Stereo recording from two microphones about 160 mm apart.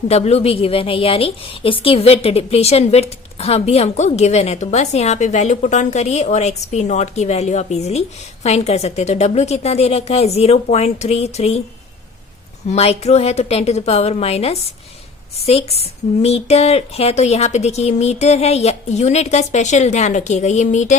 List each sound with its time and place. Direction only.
0.1 s a woman's voice: 40° left (ahead or behind)
12.6 s a woman's voice: 40° left (ahead or behind)